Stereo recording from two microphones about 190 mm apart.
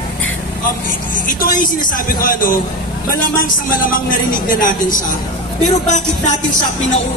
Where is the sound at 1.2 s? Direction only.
45° left (ahead or behind).